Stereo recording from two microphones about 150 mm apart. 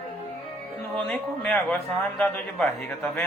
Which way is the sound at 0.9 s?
5° left (ahead or behind).